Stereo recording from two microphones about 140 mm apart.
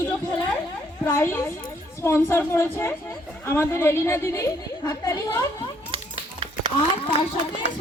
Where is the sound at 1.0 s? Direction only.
15° left (ahead or behind).